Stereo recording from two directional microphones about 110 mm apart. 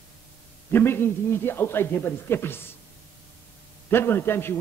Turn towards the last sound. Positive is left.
turn(degrees=20)  # may be behind; listen again after turning